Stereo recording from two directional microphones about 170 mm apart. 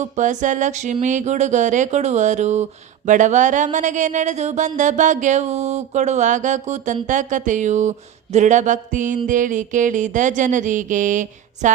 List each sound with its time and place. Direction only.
0.0 s speech: 45° right (ahead or behind)